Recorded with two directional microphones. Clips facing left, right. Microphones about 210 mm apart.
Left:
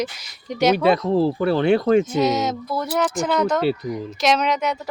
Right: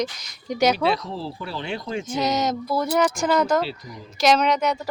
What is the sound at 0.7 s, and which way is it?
Speech, 55° left (ahead or behind).